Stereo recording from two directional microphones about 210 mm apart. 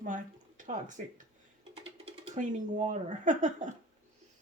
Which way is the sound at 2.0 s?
35° right (ahead or behind).